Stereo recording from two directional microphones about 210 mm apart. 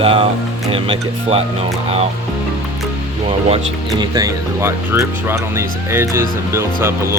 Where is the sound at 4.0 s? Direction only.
15° right (ahead or behind).